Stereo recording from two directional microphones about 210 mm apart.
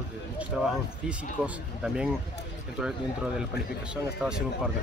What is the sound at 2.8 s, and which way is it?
Speech, centre (ahead or behind).